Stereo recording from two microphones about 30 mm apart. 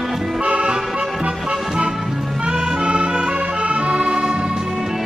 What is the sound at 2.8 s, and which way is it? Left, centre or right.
Music, right.